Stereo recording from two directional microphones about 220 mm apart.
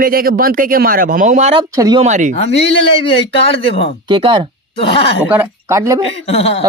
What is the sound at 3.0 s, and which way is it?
Speech, 25° left (ahead or behind).